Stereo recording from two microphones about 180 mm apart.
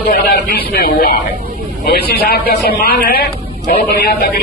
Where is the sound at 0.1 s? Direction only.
60° left (ahead or behind).